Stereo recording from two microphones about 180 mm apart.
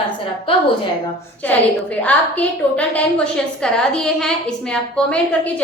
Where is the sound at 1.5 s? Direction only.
10° left (ahead or behind).